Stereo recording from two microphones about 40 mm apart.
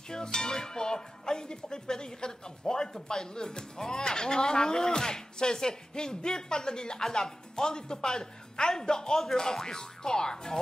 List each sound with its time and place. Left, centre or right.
0.1 s speech: centre